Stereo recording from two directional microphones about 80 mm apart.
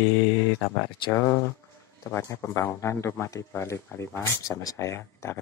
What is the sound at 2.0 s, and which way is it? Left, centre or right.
Speech, left.